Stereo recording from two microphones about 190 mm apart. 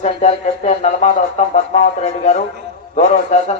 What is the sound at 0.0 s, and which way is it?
Speech, 40° left (ahead or behind).